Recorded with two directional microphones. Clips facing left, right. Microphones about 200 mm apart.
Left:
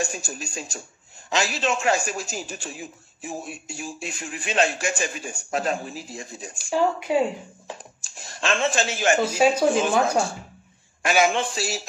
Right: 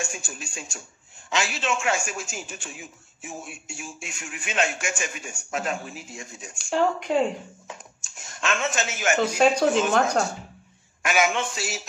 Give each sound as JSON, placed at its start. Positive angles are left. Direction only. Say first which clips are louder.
{"t": 0.0, "sound": "a man's voice", "louder": "left 5 dB", "side_deg": 35}
{"t": 6.7, "sound": "speech", "louder": "left 1 dB", "side_deg": 5}
{"t": 7.6, "sound": "a man's voice", "louder": "left 3 dB", "side_deg": 35}
{"t": 9.9, "sound": "speech", "louder": "left 1 dB", "side_deg": 10}
{"t": 11.0, "sound": "a man's voice", "louder": "left 3 dB", "side_deg": 30}